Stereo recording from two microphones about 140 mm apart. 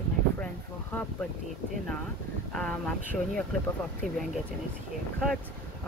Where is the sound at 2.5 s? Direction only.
5° left (ahead or behind).